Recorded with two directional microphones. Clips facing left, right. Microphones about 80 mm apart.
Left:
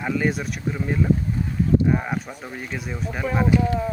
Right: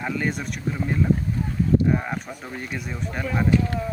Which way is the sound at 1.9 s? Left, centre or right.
Centre.